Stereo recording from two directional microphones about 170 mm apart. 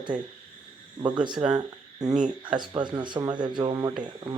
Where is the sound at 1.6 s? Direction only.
20° right (ahead or behind).